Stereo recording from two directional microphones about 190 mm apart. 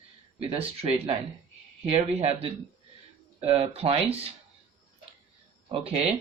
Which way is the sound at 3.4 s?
30° right (ahead or behind).